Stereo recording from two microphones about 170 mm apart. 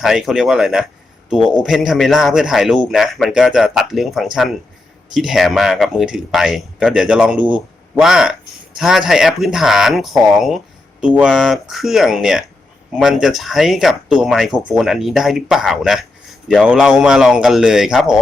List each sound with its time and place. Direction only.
0.0 s speech: centre (ahead or behind)